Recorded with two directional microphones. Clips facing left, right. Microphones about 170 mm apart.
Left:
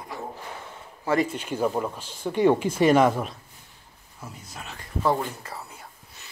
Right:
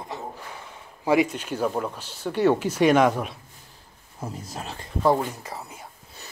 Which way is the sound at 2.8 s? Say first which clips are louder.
Even; centre (ahead or behind).